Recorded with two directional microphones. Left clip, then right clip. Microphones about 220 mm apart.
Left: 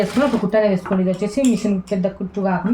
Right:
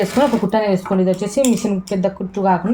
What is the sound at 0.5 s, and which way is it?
A woman's voice, 40° right (ahead or behind).